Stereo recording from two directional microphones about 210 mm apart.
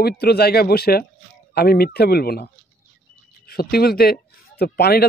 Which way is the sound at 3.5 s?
45° left (ahead or behind).